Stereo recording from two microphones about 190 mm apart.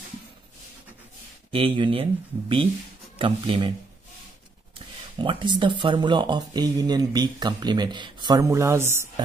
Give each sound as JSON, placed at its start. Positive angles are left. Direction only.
{"t": 1.5, "sound": "speech", "side_deg": -25}
{"t": 5.2, "sound": "speech", "side_deg": -25}